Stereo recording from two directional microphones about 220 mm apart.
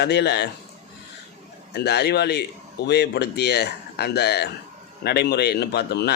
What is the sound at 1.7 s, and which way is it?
Speech, 45° left (ahead or behind).